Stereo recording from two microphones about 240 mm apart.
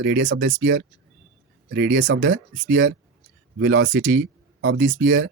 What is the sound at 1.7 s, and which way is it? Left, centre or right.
Speech, right.